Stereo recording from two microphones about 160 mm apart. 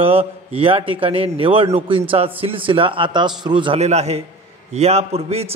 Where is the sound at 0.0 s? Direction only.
35° right (ahead or behind).